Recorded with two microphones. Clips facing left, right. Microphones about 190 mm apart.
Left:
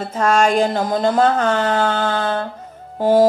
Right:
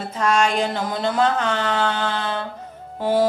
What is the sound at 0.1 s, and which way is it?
Speech, 45° left (ahead or behind).